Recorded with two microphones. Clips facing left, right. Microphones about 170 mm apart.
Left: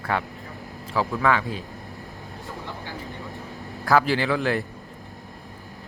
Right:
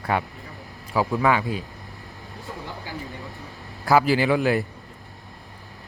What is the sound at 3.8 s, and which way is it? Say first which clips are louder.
Speech: right 2 dB; 10° right (ahead or behind).